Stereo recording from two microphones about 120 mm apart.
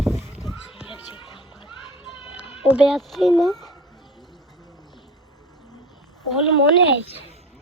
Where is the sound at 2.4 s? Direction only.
5° right (ahead or behind).